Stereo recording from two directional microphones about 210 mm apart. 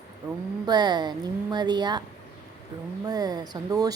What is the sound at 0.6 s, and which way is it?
A woman's voice, 20° right (ahead or behind).